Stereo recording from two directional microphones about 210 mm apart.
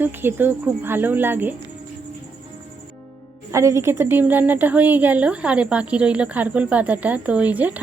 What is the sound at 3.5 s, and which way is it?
A woman's voice, 15° right (ahead or behind).